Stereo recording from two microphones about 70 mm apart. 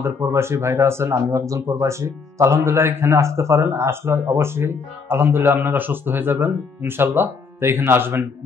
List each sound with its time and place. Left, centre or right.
0.0 s speech: right